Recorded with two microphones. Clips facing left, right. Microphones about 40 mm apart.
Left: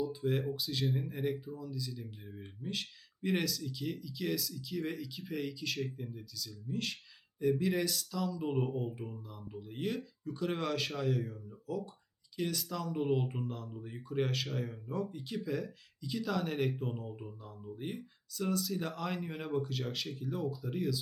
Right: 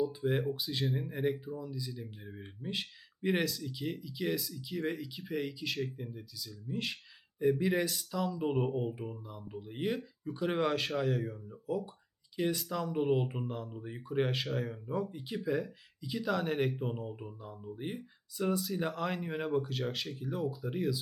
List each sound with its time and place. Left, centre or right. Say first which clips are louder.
0.1 s speech: right 2 dB; centre
10.8 s a man's voice: right 2 dB; centre
11.3 s speech: right 4 dB; centre
14.4 s a man's voice: right 3 dB; centre
15.4 s speech: right 7 dB; centre